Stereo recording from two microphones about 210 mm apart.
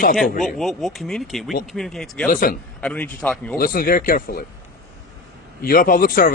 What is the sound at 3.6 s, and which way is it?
Speech, 45° left (ahead or behind).